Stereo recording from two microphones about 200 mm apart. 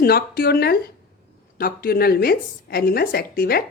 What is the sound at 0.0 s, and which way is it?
A woman's voice, 50° left (ahead or behind).